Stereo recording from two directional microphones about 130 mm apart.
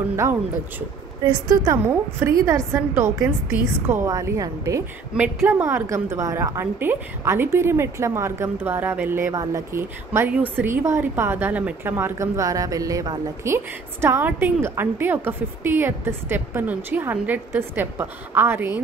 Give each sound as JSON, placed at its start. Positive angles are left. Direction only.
{"t": 0.1, "sound": "a woman's voice", "side_deg": -15}
{"t": 1.2, "sound": "a woman's voice", "side_deg": -35}